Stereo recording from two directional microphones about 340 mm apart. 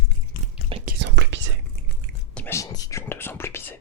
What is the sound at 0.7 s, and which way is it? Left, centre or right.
Whispering, right.